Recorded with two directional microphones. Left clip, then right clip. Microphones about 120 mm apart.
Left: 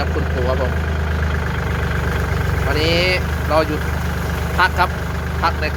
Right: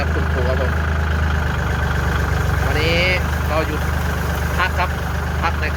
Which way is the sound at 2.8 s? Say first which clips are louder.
Left 1 dB; 50° left (ahead or behind).